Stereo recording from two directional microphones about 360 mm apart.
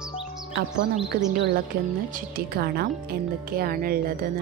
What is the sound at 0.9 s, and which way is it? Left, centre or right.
Speech, right.